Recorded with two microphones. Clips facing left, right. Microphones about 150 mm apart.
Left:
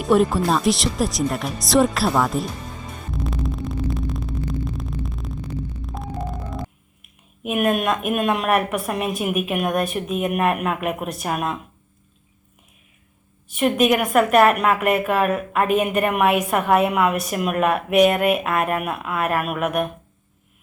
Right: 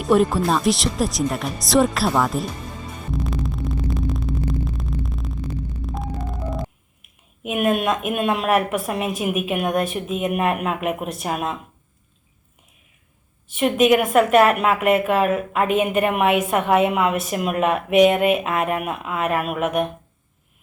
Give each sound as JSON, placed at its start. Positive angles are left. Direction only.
{"t": 0.0, "sound": "speech", "side_deg": 0}
{"t": 3.1, "sound": "a sound", "side_deg": 0}
{"t": 5.8, "sound": "hum", "side_deg": 0}
{"t": 7.4, "sound": "a woman's voice", "side_deg": -25}
{"t": 13.5, "sound": "a woman's voice", "side_deg": -25}